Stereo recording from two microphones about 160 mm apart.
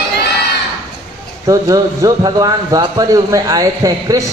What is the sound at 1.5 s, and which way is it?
Speech, 20° right (ahead or behind).